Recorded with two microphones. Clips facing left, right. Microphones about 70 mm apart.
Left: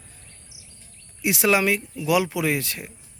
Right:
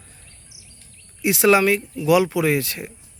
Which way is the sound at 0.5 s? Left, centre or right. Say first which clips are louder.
Even; left.